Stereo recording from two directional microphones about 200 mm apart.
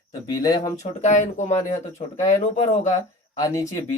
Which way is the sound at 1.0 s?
35° left (ahead or behind).